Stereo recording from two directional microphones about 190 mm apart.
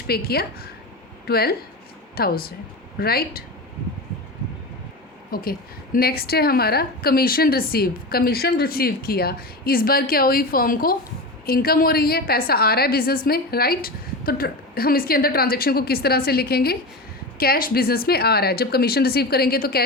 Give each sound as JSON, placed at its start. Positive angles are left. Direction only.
{"t": 0.1, "sound": "a woman's voice", "side_deg": 55}
{"t": 5.3, "sound": "a woman's voice", "side_deg": 50}